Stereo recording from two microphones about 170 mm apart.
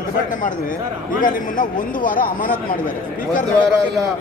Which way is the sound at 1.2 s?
50° left (ahead or behind).